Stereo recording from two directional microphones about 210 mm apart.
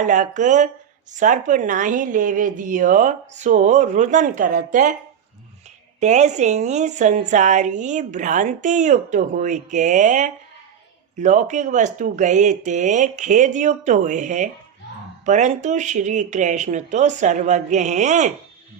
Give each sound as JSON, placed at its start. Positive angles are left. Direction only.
{"t": 0.0, "sound": "a woman's voice", "side_deg": -40}
{"t": 6.0, "sound": "a woman's voice", "side_deg": -35}